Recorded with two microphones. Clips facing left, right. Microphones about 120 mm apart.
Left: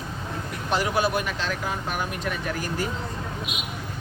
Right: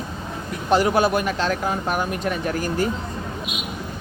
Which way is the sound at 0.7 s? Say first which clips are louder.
Right 6 dB; 45° right (ahead or behind).